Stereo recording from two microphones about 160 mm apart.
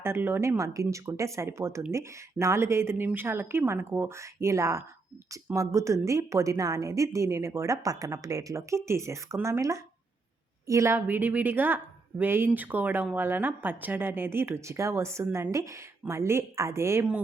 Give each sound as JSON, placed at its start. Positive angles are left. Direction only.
{"t": 0.0, "sound": "a woman's voice", "side_deg": -15}